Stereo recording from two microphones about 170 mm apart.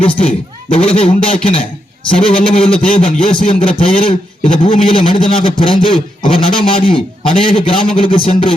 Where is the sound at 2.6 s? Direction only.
5° left (ahead or behind).